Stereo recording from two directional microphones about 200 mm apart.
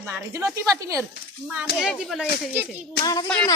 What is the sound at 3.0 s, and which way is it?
Speech, 20° left (ahead or behind).